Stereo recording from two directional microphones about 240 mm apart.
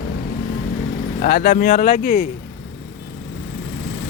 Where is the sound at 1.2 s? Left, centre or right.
Left.